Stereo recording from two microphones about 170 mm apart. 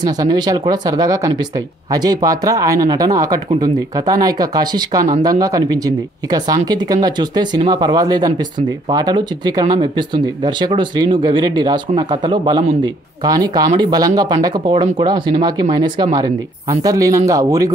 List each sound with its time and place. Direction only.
0.0 s speech: 25° right (ahead or behind)